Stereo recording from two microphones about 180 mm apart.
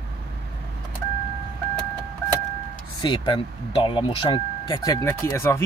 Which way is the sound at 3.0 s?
25° left (ahead or behind).